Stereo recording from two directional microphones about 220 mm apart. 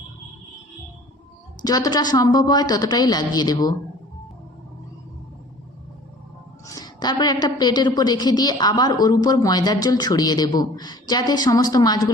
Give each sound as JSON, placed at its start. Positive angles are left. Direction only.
{"t": 1.6, "sound": "a woman's voice", "side_deg": 15}
{"t": 6.7, "sound": "a woman's voice", "side_deg": 15}